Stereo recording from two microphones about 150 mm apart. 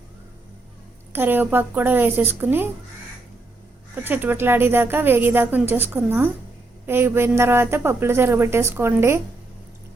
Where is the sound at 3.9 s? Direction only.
10° right (ahead or behind).